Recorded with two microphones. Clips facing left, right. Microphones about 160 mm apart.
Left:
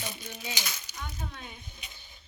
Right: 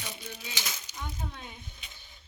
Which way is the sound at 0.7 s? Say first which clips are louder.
Right 1 dB; 20° right (ahead or behind).